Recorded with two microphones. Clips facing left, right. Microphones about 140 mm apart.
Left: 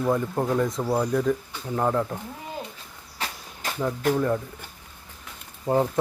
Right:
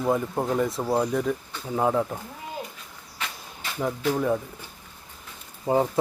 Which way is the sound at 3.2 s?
35° left (ahead or behind).